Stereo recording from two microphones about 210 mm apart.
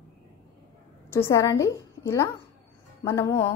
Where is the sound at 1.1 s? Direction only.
15° left (ahead or behind).